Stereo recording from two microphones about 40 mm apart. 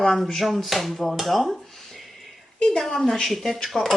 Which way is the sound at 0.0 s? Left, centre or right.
Centre.